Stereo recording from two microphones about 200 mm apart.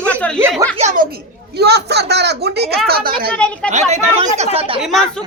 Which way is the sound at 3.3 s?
5° left (ahead or behind).